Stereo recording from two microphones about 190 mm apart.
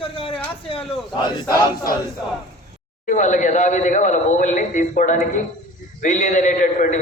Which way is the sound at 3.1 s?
40° left (ahead or behind).